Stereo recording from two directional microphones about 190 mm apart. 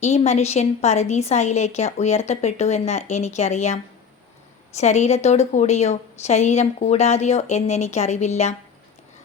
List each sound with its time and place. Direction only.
0.0 s a woman's voice: 35° left (ahead or behind)